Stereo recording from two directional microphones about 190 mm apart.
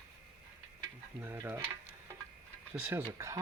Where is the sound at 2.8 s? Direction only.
10° right (ahead or behind).